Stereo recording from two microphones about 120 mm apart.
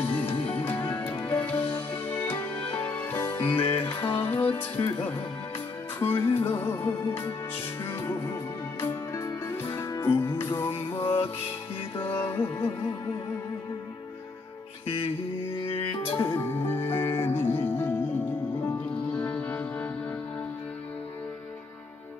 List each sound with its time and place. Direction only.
0.0 s music: 15° left (ahead or behind)
5.9 s music: 20° left (ahead or behind)
15.5 s music: 50° left (ahead or behind)
16.3 s music: 20° left (ahead or behind)